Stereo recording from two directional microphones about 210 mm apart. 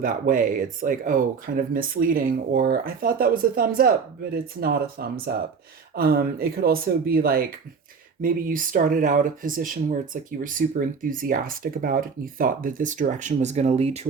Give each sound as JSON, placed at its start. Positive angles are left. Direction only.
{"t": 0.0, "sound": "speech", "side_deg": -40}